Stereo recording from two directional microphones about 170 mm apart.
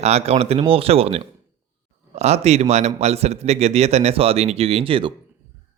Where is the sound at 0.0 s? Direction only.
40° right (ahead or behind).